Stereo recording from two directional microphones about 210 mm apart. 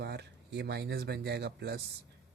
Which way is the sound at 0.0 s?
50° right (ahead or behind).